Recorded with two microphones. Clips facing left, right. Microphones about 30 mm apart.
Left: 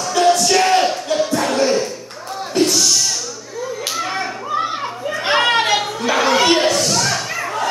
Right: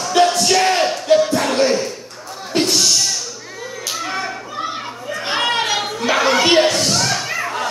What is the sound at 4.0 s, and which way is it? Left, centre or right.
Children playing, centre.